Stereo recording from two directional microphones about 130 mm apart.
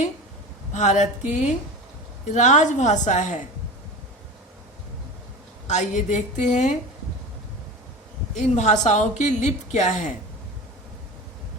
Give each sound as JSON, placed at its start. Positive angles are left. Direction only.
{"t": 0.7, "sound": "a woman's voice", "side_deg": 65}
{"t": 5.6, "sound": "a woman's voice", "side_deg": 65}
{"t": 8.4, "sound": "a woman's voice", "side_deg": 65}